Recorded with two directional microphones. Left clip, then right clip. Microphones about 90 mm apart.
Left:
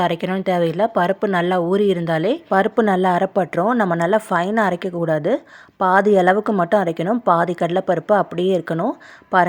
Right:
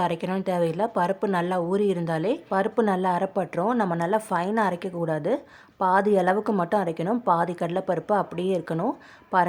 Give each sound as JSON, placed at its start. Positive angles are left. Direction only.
{"t": 0.0, "sound": "speech", "side_deg": 40}
{"t": 2.5, "sound": "a woman's voice", "side_deg": 55}